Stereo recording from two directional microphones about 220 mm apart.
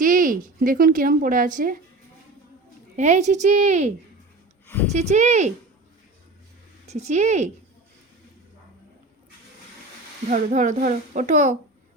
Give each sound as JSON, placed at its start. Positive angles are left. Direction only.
{"t": 0.0, "sound": "speech", "side_deg": -40}
{"t": 2.9, "sound": "speech", "side_deg": -35}
{"t": 6.8, "sound": "speech", "side_deg": -30}
{"t": 10.2, "sound": "speech", "side_deg": -35}